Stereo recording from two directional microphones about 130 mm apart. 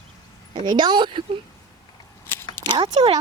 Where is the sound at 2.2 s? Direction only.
15° left (ahead or behind).